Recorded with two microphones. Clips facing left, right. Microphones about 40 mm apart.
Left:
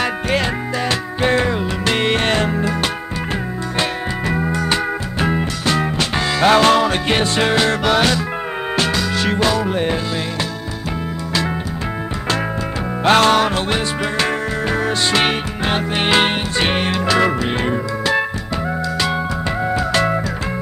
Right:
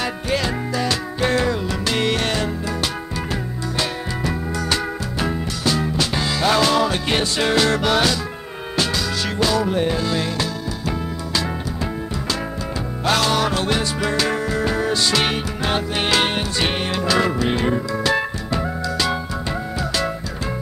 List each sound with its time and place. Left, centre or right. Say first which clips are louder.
0.0 s music: left 4 dB; left
4.3 s music: left 5 dB; left
5.3 s music: left 4 dB; left
7.8 s music: left 3 dB; left
13.0 s music: left 6 dB; left
19.7 s music: left 7 dB; left